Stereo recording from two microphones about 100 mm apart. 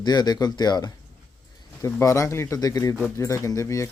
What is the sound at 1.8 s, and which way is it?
Speech, 30° left (ahead or behind).